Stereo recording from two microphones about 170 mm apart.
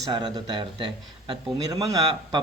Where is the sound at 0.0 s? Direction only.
25° right (ahead or behind).